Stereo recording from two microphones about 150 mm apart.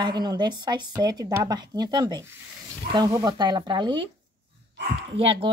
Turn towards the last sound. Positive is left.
turn(degrees=-40)  # may be behind; listen again after turning